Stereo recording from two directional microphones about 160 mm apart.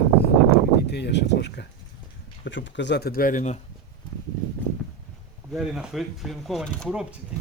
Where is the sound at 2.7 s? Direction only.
90° left; by 3.5 s 50° left (ahead or behind).